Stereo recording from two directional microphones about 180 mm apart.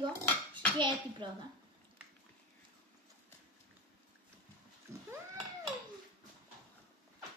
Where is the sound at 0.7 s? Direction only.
25° right (ahead or behind).